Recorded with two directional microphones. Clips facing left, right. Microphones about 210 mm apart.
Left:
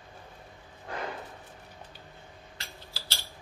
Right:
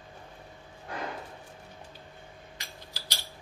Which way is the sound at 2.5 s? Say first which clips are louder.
Even; 15° right (ahead or behind).